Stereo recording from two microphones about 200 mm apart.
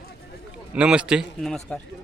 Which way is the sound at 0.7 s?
5° right (ahead or behind).